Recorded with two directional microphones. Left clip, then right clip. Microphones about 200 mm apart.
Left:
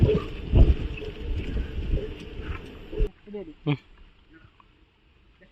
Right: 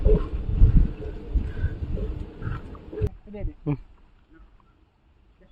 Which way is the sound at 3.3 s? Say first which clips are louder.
Left 1 dB; 10° right (ahead or behind).